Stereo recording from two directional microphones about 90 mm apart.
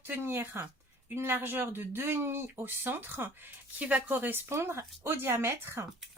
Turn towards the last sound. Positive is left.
turn(degrees=-30)  # may be behind; listen again after turning